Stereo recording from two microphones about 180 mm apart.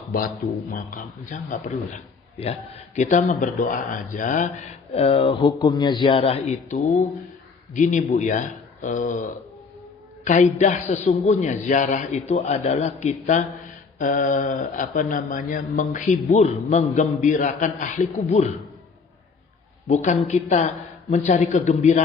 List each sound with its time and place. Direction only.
0.7 s speech: 50° left (ahead or behind)
4.9 s speech: 30° left (ahead or behind)
19.9 s speech: 40° left (ahead or behind)